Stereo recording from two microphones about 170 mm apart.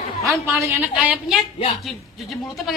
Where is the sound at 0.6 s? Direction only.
15° right (ahead or behind).